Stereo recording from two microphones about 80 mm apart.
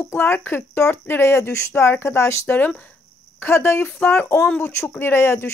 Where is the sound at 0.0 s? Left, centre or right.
Left.